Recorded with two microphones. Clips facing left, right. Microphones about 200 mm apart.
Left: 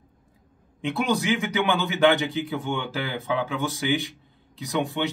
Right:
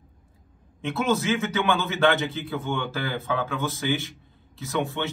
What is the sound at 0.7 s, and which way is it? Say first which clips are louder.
Speech: even; 15° left (ahead or behind).